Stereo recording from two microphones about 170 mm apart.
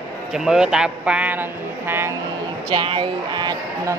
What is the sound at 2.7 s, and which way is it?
Speech, 30° right (ahead or behind).